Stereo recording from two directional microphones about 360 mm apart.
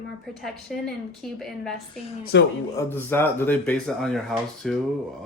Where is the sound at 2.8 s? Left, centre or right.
Centre.